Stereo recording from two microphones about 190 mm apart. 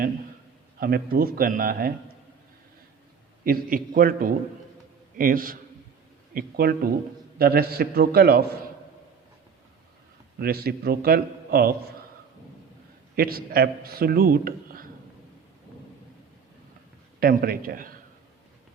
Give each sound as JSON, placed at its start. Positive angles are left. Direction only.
{"t": 0.8, "sound": "a man's voice", "side_deg": -50}
{"t": 3.4, "sound": "a man's voice", "side_deg": -50}
{"t": 10.4, "sound": "a man's voice", "side_deg": -55}
{"t": 13.1, "sound": "a man's voice", "side_deg": -50}
{"t": 17.2, "sound": "a man's voice", "side_deg": -50}